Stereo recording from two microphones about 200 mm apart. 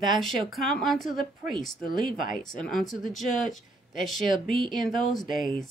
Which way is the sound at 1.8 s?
45° left (ahead or behind).